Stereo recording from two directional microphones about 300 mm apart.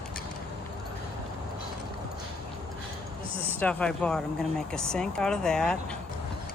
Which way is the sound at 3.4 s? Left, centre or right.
Centre.